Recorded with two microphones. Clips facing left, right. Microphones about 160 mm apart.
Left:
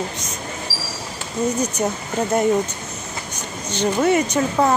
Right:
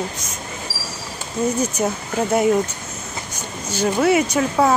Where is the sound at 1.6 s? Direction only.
5° right (ahead or behind).